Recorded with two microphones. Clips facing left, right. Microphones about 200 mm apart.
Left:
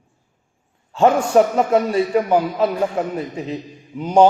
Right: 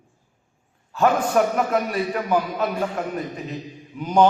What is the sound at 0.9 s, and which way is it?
A man's voice, 25° left (ahead or behind).